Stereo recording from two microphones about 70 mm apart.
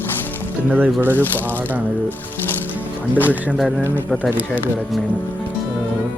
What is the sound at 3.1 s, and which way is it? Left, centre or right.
Speech, left.